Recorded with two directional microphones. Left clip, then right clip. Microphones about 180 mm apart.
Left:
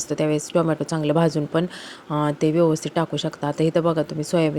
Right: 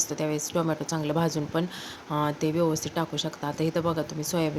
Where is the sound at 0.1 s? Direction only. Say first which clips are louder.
Left 7 dB; 35° left (ahead or behind).